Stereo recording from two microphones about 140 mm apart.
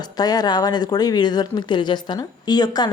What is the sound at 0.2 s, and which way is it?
A woman's voice, 30° left (ahead or behind).